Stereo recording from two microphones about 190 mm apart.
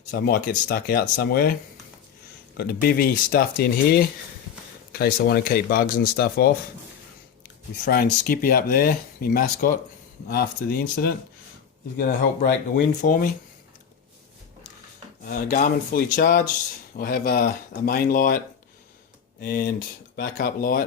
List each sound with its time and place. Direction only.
0.1 s speech: 50° left (ahead or behind)
2.6 s speech: 50° left (ahead or behind)
15.2 s speech: 45° left (ahead or behind)
19.4 s speech: 50° left (ahead or behind)